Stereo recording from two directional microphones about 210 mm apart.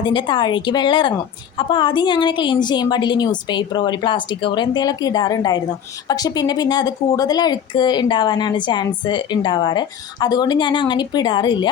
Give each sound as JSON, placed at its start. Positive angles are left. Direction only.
{"t": 0.0, "sound": "a woman's voice", "side_deg": 20}